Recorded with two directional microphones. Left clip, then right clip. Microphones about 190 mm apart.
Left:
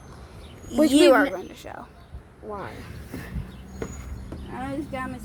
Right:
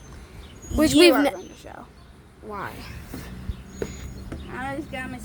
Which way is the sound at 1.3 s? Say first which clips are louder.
Left 3 dB; 20° left (ahead or behind).